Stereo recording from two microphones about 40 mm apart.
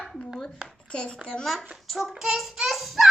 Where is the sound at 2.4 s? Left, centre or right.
Centre.